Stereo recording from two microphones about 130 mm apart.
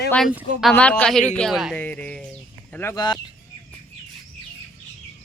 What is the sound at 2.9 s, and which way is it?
Speech, 35° left (ahead or behind).